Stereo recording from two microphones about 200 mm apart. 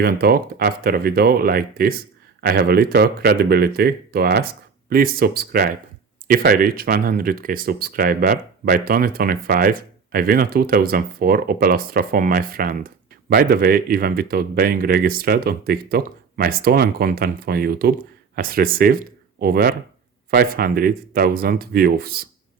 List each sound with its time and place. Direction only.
0.0 s speech: 50° right (ahead or behind)